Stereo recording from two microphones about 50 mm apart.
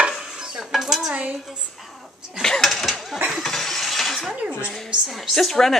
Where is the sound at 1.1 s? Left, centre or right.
Right.